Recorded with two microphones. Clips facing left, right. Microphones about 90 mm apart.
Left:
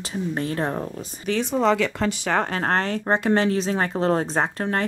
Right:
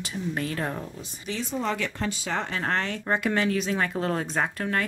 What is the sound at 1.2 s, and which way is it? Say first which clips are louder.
Speech: left 8 dB; 65° left (ahead or behind).